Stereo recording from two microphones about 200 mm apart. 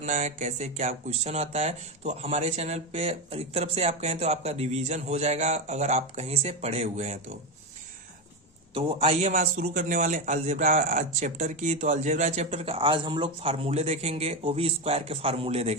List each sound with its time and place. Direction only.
0.0 s speech: 35° right (ahead or behind)
8.7 s speech: 30° right (ahead or behind)